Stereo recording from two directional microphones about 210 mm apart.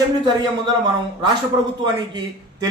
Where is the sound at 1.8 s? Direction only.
20° right (ahead or behind).